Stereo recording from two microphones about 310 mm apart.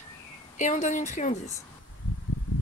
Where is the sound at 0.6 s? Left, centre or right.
Left.